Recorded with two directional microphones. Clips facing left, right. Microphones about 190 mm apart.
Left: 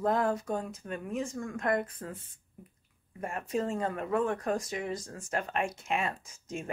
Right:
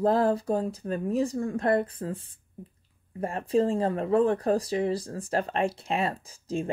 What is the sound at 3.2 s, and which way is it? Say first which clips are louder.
Speech: right 7 dB; 30° right (ahead or behind).